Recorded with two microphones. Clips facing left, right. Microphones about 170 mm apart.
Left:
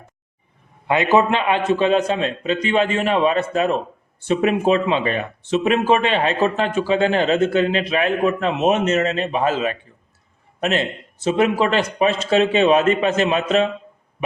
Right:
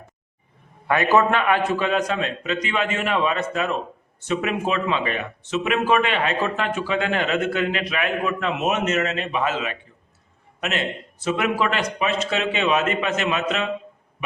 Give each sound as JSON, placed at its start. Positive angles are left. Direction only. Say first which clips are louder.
{"t": 0.9, "sound": "a man's voice", "louder": "left 2 dB", "side_deg": 20}